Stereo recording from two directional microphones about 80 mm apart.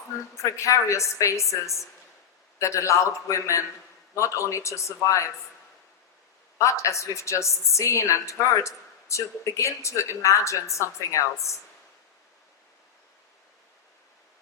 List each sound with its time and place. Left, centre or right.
0.3 s a woman's voice: left
6.6 s a woman's voice: left